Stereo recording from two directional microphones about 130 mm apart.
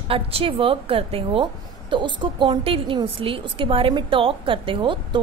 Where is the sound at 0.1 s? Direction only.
45° right (ahead or behind).